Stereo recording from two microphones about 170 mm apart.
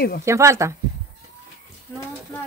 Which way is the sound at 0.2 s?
15° right (ahead or behind).